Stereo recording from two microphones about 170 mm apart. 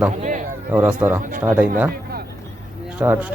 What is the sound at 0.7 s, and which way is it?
Speech, 10° right (ahead or behind).